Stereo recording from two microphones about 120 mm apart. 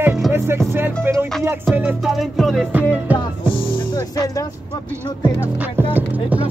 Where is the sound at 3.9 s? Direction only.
30° left (ahead or behind).